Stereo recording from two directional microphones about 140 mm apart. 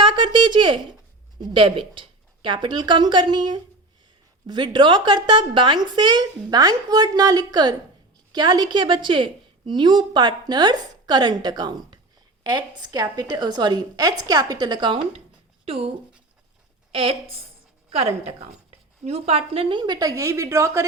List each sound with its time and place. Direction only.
0.0 s a sound: 35° right (ahead or behind)
1.4 s a woman's voice: 35° right (ahead or behind)
16.9 s a woman's voice: 40° right (ahead or behind); by 20.8 s 20° right (ahead or behind)